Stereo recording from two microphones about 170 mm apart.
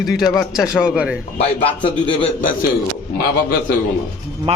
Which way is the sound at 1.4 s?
35° left (ahead or behind).